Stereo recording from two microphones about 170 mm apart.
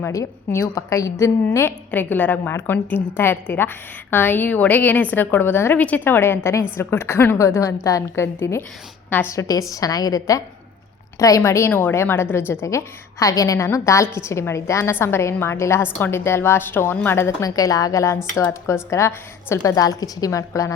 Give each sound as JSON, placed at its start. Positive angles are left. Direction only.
{"t": 0.0, "sound": "a woman's voice", "side_deg": 15}